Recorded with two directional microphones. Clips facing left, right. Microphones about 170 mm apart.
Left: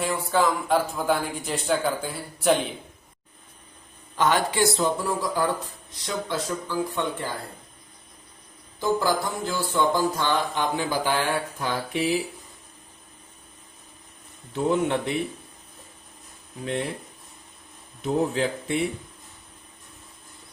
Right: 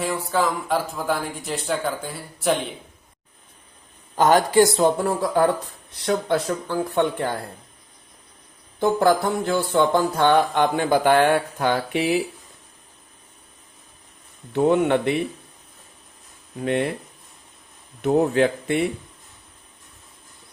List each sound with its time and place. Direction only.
0.0 s speech: centre (ahead or behind)
4.1 s a man's voice: 45° right (ahead or behind); by 5.5 s 60° right (ahead or behind)
6.1 s music: 60° right (ahead or behind)
8.8 s music: 60° right (ahead or behind)
14.5 s a man's voice: 65° right (ahead or behind)
16.6 s music: 65° right (ahead or behind)
18.0 s music: 65° right (ahead or behind)